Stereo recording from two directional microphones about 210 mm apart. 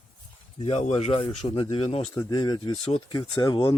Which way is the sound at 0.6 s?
30° left (ahead or behind).